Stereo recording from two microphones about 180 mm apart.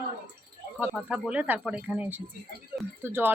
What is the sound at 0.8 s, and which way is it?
Speech, 5° right (ahead or behind).